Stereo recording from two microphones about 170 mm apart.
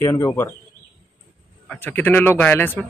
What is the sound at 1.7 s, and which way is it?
Speech, 10° left (ahead or behind).